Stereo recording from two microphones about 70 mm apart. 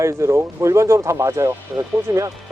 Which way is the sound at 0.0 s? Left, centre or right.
Right.